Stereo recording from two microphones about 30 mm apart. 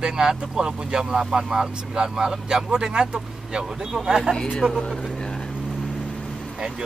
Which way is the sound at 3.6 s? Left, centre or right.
Centre.